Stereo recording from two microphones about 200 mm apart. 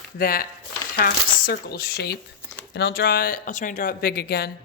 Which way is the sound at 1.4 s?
50° left (ahead or behind).